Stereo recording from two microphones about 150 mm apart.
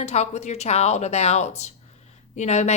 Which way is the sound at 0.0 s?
45° left (ahead or behind).